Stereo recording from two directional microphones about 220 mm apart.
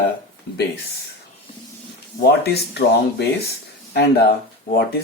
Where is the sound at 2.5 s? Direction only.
50° left (ahead or behind).